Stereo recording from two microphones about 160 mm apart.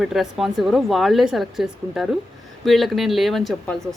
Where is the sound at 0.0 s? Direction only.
Centre (ahead or behind).